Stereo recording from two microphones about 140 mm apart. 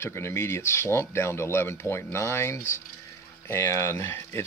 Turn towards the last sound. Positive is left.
turn(degrees=20)  # may be behind; listen again after turning